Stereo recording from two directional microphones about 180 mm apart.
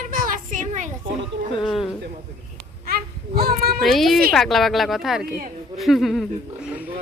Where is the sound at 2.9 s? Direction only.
55° right (ahead or behind).